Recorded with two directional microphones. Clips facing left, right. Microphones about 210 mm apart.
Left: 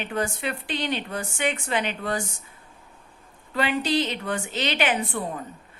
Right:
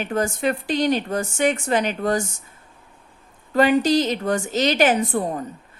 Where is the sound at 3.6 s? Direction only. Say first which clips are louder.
Right 7 dB; 45° right (ahead or behind).